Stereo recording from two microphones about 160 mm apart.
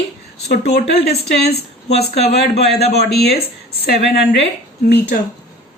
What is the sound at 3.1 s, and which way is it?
A woman's voice, 85° left.